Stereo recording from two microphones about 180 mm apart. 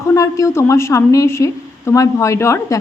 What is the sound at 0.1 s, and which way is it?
A woman's voice, 15° left (ahead or behind).